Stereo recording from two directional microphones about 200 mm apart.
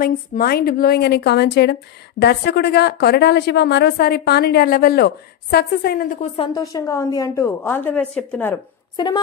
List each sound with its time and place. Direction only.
0.0 s speech: 45° left (ahead or behind)
6.3 s a woman's voice: 20° left (ahead or behind); by 8.5 s 5° left (ahead or behind)
8.9 s a sound: 20° left (ahead or behind)